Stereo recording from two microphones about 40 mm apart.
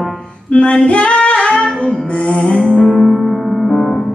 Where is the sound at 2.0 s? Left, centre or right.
Left.